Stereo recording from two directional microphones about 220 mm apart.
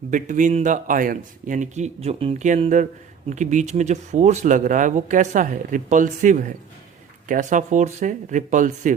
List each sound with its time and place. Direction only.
0.1 s speech: 35° right (ahead or behind)